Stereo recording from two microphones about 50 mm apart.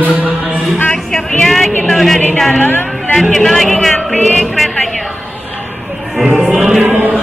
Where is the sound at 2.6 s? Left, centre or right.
Left.